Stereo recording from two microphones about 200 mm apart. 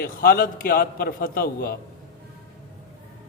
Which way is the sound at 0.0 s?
50° left (ahead or behind).